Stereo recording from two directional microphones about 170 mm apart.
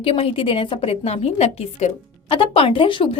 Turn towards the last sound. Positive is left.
turn(degrees=30)  # may be behind; listen again after turning